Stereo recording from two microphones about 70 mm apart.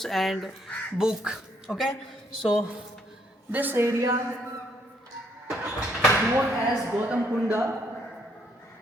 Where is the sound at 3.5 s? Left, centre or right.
Right.